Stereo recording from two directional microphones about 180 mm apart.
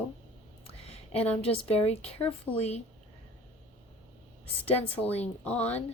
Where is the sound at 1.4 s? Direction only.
35° left (ahead or behind).